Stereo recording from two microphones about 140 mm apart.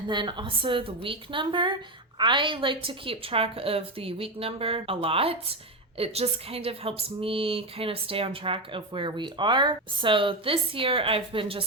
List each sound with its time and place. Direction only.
0.1 s a woman's voice: 35° right (ahead or behind)